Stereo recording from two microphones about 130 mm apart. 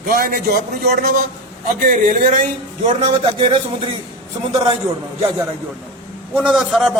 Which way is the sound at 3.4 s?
40° right (ahead or behind).